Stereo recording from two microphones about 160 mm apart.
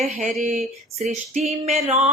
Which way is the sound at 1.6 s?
40° right (ahead or behind).